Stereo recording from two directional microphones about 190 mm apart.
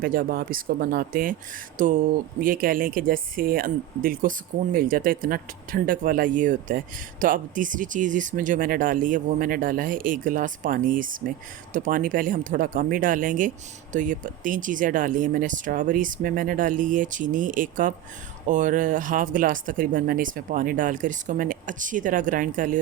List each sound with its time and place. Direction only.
0.0 s speech: 45° right (ahead or behind)